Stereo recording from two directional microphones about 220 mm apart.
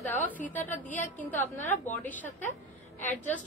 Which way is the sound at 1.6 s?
35° left (ahead or behind).